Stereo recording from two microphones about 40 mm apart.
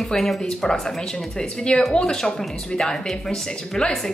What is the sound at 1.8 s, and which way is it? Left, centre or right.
A woman's voice, centre.